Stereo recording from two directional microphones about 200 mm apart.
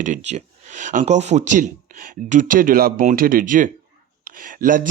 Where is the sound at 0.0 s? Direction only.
35° right (ahead or behind).